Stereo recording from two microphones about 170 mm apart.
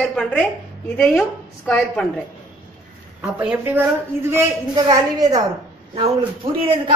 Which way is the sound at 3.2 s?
5° right (ahead or behind).